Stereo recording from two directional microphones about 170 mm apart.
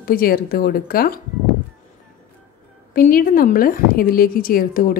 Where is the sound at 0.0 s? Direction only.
60° left (ahead or behind).